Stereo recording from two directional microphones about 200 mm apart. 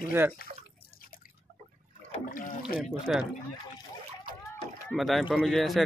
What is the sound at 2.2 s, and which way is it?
Speech, 45° left (ahead or behind).